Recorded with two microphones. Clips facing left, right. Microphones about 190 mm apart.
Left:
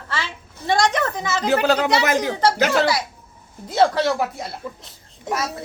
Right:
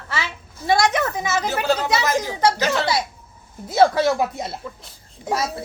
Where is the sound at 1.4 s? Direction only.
65° left (ahead or behind).